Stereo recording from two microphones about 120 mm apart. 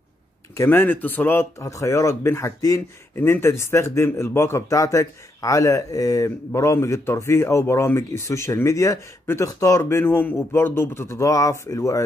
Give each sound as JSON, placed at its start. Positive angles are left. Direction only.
{"t": 0.6, "sound": "speech", "side_deg": 15}